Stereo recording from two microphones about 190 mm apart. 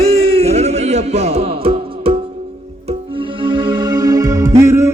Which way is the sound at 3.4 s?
25° right (ahead or behind).